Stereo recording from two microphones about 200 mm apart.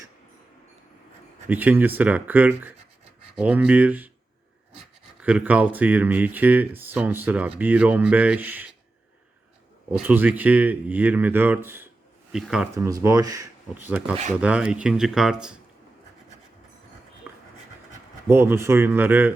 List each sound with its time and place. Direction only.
1.5 s speech: 10° right (ahead or behind)
9.9 s speech: 10° right (ahead or behind)
12.7 s speech: 15° right (ahead or behind)
18.3 s speech: 10° right (ahead or behind)